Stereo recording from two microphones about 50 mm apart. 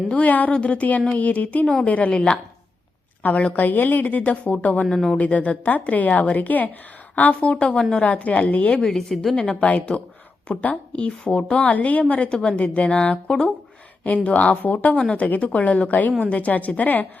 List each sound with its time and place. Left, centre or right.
0.1 s a woman's voice: left
3.2 s a woman's voice: left
8.8 s a woman's voice: centre
9.3 s a woman's voice: centre; by 17.1 s left